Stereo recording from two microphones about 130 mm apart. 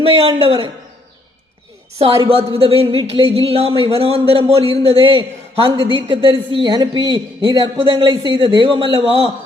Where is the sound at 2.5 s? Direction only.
45° right (ahead or behind).